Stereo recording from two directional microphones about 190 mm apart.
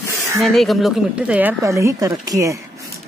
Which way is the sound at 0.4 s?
Centre (ahead or behind).